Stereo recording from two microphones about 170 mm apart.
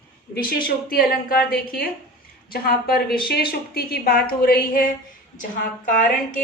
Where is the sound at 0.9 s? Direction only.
60° left (ahead or behind).